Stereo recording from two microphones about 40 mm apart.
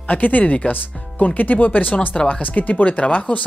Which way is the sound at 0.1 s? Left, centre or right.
Left.